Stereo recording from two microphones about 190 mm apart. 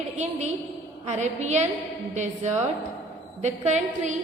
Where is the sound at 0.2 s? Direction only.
35° right (ahead or behind).